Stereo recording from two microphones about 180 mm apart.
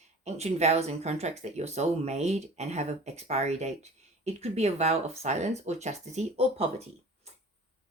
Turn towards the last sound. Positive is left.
turn(degrees=-35)  # may be behind; listen again after turning